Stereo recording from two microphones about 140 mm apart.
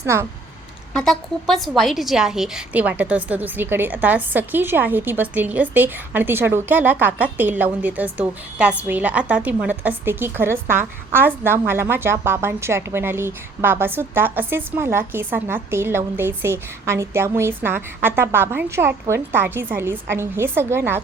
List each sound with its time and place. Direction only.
0.0 s speech: 20° right (ahead or behind)
0.9 s a woman's voice: 5° left (ahead or behind); by 21.0 s 15° right (ahead or behind)